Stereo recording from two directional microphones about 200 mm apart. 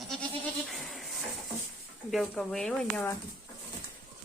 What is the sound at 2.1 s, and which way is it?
Speech, 5° left (ahead or behind).